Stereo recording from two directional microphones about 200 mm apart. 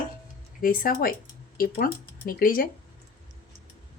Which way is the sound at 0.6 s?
45° left (ahead or behind).